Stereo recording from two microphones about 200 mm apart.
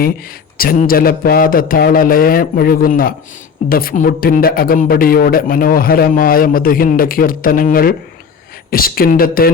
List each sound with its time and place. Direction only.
0.5 s a man's voice: 45° left (ahead or behind)